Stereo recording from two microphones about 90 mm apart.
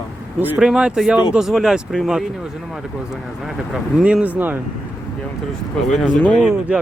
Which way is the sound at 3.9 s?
10° right (ahead or behind).